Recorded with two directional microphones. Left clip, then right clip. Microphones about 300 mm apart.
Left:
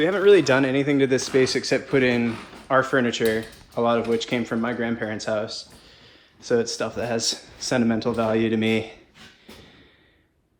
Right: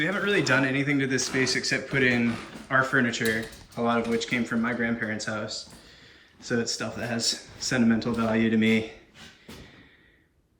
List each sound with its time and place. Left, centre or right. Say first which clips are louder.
0.0 s speech: left 9 dB; centre